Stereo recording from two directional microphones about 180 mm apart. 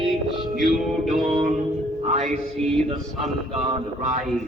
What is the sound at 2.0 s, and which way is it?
Music, 35° right (ahead or behind).